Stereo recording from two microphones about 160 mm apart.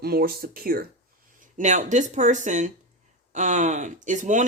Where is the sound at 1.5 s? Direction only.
50° right (ahead or behind).